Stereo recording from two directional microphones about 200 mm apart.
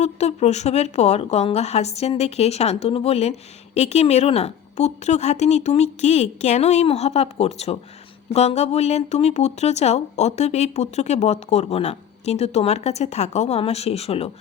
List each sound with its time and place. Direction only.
0.0 s speech: 35° left (ahead or behind)